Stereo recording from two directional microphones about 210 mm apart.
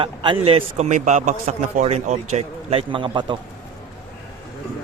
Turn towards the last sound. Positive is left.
turn(degrees=-25)  # may be behind; listen again after turning